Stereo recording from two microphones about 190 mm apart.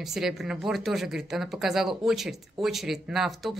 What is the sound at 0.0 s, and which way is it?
Speech, centre (ahead or behind).